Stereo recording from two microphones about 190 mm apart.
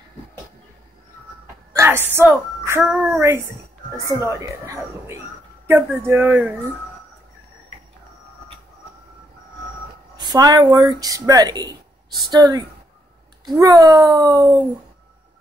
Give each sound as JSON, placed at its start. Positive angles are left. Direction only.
{"t": 1.7, "sound": "a woman's voice", "side_deg": -15}
{"t": 5.7, "sound": "speech", "side_deg": -15}
{"t": 10.1, "sound": "speech", "side_deg": -20}